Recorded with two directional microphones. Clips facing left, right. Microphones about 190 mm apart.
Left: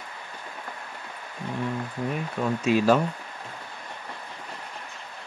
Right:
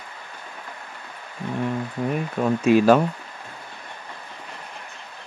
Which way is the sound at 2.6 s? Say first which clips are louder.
Right 5 dB; 55° right (ahead or behind).